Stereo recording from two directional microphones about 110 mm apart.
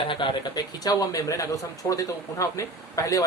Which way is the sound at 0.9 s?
35° left (ahead or behind).